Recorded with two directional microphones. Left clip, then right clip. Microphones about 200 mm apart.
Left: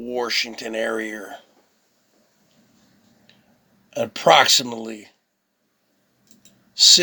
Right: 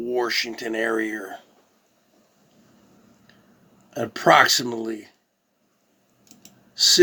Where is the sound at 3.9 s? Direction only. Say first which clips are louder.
Left 2 dB; 30° left (ahead or behind).